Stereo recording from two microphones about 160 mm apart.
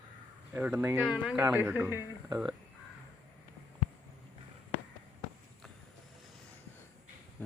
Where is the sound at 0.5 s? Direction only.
10° right (ahead or behind).